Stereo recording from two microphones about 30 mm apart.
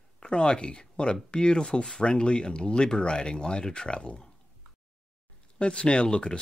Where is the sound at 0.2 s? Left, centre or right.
Left.